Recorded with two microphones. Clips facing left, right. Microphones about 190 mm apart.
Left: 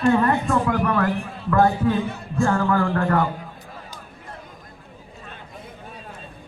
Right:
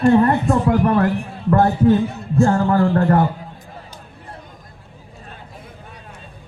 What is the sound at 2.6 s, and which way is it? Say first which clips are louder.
Speech: right 5 dB; 35° right (ahead or behind).